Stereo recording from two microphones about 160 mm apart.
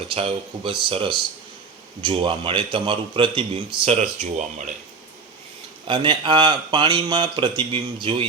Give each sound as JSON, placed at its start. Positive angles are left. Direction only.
{"t": 0.1, "sound": "speech", "side_deg": -35}
{"t": 5.9, "sound": "speech", "side_deg": -30}